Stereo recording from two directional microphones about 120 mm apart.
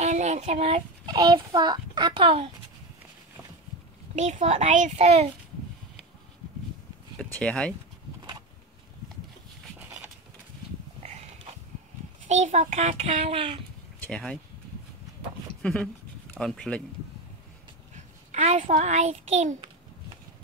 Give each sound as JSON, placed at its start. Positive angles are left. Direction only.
{"t": 0.0, "sound": "speech", "side_deg": -75}
{"t": 1.0, "sound": "a child's voice", "side_deg": -35}
{"t": 4.1, "sound": "a child's voice", "side_deg": -75}
{"t": 7.2, "sound": "speech", "side_deg": 10}
{"t": 9.8, "sound": "a sound", "side_deg": -15}
{"t": 11.0, "sound": "a sound", "side_deg": -70}
{"t": 12.3, "sound": "a child's voice", "side_deg": -70}
{"t": 14.0, "sound": "speech", "side_deg": 10}
{"t": 15.6, "sound": "speech", "side_deg": 10}
{"t": 17.9, "sound": "a child's voice", "side_deg": -70}